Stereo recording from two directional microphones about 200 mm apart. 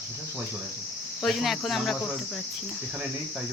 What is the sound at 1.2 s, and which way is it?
Speech, centre (ahead or behind).